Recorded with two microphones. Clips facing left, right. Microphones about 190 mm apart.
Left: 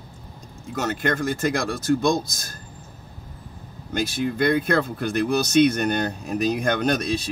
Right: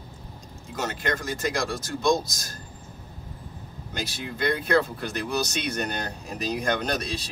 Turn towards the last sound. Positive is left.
turn(degrees=50)  # may be behind; listen again after turning